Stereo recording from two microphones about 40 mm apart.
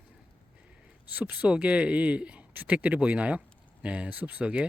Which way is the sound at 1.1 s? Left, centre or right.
Right.